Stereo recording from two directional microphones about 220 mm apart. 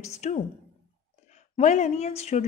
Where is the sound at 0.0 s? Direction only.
30° left (ahead or behind).